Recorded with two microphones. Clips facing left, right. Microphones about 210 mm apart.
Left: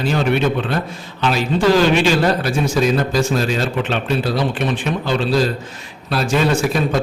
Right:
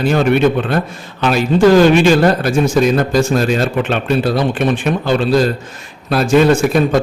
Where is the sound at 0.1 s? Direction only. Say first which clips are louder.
Right 5 dB; 50° right (ahead or behind).